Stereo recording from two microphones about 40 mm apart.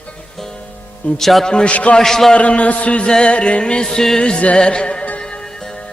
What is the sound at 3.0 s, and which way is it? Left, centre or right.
Music, left.